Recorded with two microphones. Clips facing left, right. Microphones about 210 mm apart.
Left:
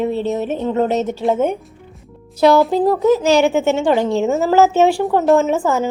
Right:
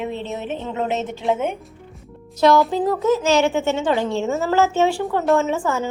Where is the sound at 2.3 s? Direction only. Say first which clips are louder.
Left 3 dB; 35° left (ahead or behind).